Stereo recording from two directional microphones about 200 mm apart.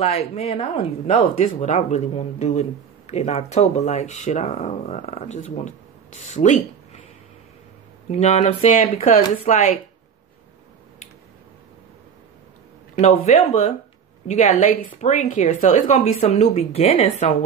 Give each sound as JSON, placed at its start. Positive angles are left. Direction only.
{"t": 0.0, "sound": "speech", "side_deg": 30}
{"t": 1.2, "sound": "speech", "side_deg": 40}
{"t": 8.1, "sound": "speech", "side_deg": 35}
{"t": 12.9, "sound": "speech", "side_deg": 35}